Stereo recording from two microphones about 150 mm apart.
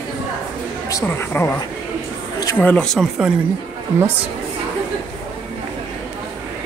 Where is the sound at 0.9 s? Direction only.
20° left (ahead or behind).